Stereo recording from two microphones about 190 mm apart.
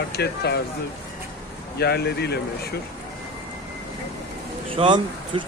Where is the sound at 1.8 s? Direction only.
60° left (ahead or behind).